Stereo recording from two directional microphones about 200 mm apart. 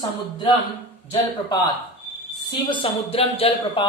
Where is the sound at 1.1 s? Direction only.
20° left (ahead or behind).